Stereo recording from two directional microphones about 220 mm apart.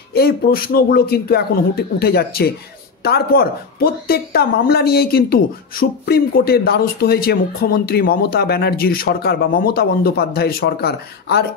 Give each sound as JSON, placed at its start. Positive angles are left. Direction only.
{"t": 0.1, "sound": "speech", "side_deg": 45}